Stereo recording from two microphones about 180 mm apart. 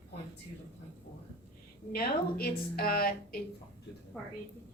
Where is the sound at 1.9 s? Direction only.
60° left (ahead or behind).